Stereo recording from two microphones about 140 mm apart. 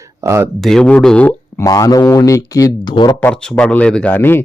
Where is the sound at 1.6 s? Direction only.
25° left (ahead or behind).